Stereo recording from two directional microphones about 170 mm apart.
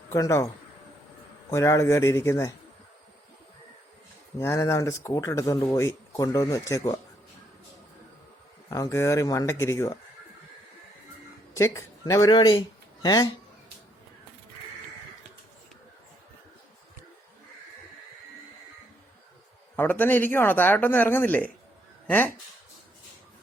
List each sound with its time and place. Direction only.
0.1 s speech: 15° left (ahead or behind)
4.4 s speech: 20° left (ahead or behind)
8.7 s speech: 20° left (ahead or behind)
11.5 s speech: 15° left (ahead or behind)
19.7 s speech: 10° left (ahead or behind)